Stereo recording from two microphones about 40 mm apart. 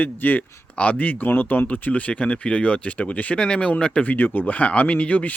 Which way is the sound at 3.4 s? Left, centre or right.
Left.